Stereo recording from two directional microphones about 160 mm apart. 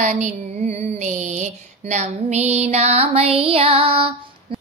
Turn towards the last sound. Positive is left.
turn(degrees=-35)  # may be behind; listen again after turning